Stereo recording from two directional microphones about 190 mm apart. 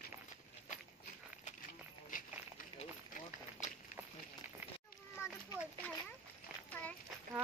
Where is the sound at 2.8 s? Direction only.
40° left (ahead or behind).